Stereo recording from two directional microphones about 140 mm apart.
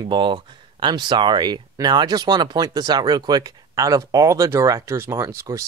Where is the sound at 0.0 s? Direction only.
35° right (ahead or behind).